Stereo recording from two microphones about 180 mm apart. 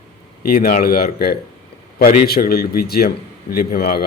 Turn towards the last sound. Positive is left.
turn(degrees=55)  # may be behind; listen again after turning